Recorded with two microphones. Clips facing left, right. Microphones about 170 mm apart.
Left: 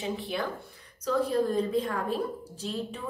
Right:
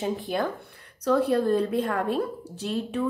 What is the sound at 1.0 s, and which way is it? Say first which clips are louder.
A woman's voice: right 4 dB; 65° right (ahead or behind).